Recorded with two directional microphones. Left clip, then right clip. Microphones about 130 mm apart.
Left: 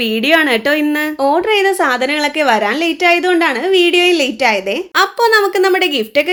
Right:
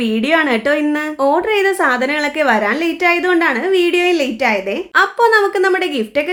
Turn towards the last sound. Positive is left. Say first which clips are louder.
# left 3 dB
turn(degrees=20)  # may be behind; listen again after turning